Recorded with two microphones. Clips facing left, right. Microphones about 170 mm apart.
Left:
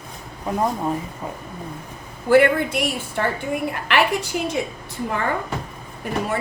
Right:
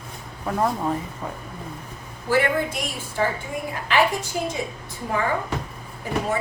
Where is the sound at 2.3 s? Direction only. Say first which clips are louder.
Left 6 dB; 65° left (ahead or behind).